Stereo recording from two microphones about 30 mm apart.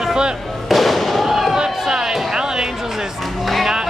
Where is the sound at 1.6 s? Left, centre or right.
Right.